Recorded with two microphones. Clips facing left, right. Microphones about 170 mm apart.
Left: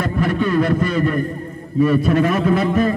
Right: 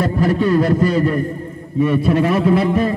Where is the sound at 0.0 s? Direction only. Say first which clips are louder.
Right 3 dB; 35° right (ahead or behind).